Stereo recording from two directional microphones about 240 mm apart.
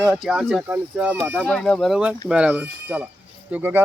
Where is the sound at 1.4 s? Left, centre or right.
Centre.